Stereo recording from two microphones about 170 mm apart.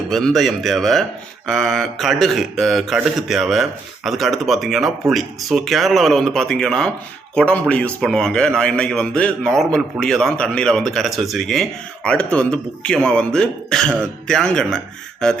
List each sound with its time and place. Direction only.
0.1 s a man's voice: centre (ahead or behind)